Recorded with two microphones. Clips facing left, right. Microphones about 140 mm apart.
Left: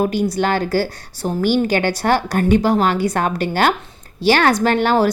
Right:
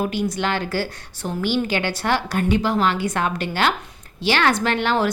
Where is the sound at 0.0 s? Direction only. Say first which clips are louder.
Left 5 dB; 45° left (ahead or behind).